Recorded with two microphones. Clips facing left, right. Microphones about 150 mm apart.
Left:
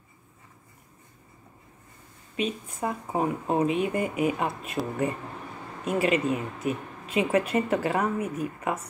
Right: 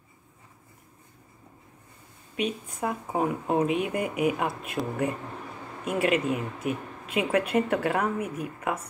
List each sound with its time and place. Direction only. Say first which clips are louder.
2.3 s speech: even; 5° right (ahead or behind)